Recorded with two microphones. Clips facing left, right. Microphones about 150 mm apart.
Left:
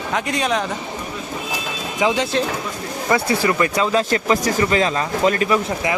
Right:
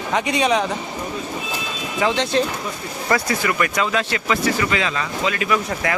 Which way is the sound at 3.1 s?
30° left (ahead or behind).